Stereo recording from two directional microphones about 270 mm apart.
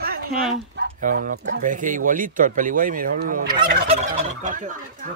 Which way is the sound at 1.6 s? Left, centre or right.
Right.